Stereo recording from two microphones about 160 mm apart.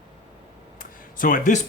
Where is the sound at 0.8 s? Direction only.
60° left (ahead or behind).